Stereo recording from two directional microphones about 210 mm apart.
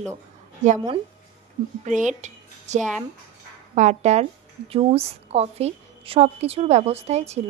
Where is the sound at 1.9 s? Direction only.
35° right (ahead or behind).